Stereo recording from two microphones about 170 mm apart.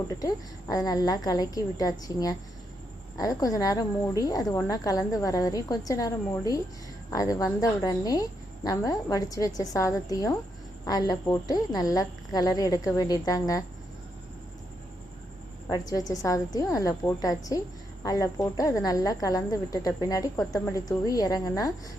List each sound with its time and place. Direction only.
0.2 s speech: 20° left (ahead or behind)
15.7 s speech: 20° left (ahead or behind)